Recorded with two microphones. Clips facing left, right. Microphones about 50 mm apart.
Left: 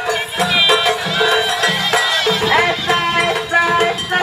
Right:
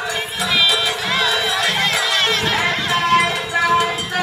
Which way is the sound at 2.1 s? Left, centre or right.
Right.